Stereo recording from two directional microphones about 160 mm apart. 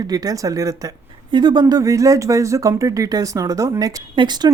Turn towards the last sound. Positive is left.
turn(degrees=-30)  # may be behind; listen again after turning